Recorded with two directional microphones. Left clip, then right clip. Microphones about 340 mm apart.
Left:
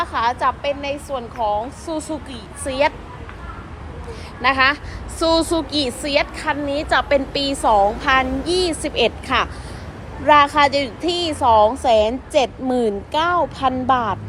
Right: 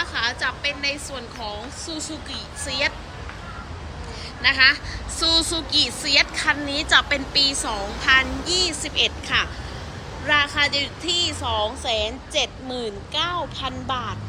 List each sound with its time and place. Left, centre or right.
0.0 s a woman's voice: centre
4.4 s a woman's voice: centre
12.4 s speech: left
13.2 s a woman's voice: centre